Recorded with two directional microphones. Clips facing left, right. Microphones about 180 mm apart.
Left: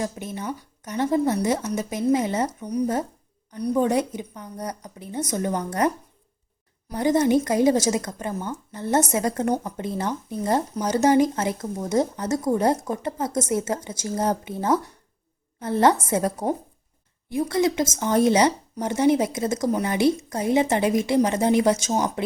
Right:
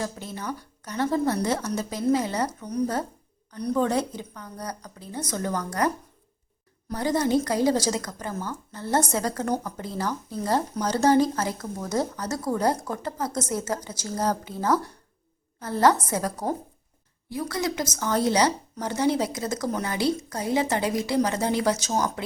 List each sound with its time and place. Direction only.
0.0 s speech: 20° left (ahead or behind)
6.9 s speech: 20° left (ahead or behind)